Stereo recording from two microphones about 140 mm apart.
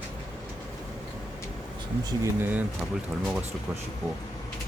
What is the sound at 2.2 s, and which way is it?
Speech, 15° right (ahead or behind).